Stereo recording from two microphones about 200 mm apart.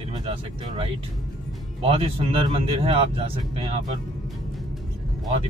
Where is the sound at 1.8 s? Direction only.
25° right (ahead or behind).